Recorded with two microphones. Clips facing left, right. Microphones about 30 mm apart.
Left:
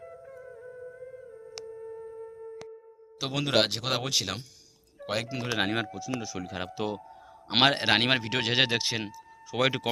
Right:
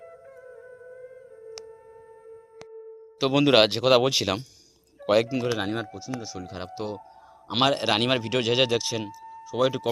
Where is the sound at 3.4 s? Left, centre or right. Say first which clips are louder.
Right 6 dB; right.